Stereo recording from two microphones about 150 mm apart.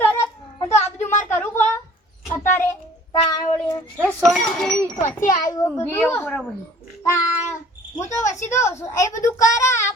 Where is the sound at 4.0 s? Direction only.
Centre (ahead or behind).